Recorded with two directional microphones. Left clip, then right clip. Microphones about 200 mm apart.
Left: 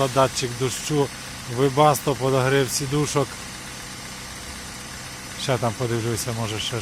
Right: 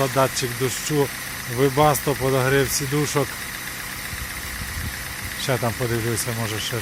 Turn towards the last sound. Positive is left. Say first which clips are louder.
# right 1 dB
turn(degrees=0)  # may be behind; listen again after turning